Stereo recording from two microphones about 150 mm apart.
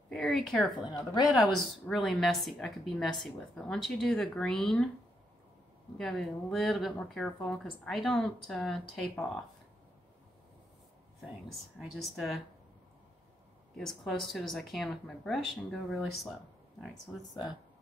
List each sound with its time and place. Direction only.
0.1 s speech: centre (ahead or behind)
0.8 s speech: 25° left (ahead or behind)
1.3 s speech: centre (ahead or behind)
5.9 s speech: centre (ahead or behind)
11.8 s speech: centre (ahead or behind)
13.7 s speech: centre (ahead or behind)